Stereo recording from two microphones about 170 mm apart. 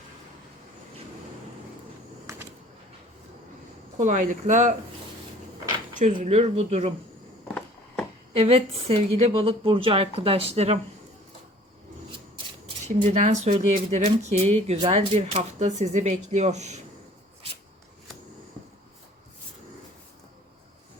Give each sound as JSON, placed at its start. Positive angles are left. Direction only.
{"t": 2.3, "sound": "a sound", "side_deg": -15}
{"t": 3.9, "sound": "speech", "side_deg": -45}
{"t": 6.1, "sound": "a woman's voice", "side_deg": -40}
{"t": 7.4, "sound": "a sound", "side_deg": 5}
{"t": 8.4, "sound": "a woman's voice", "side_deg": -35}
{"t": 13.1, "sound": "speech", "side_deg": -45}